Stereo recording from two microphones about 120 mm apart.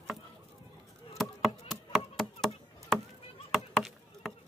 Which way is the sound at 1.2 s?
Centre (ahead or behind).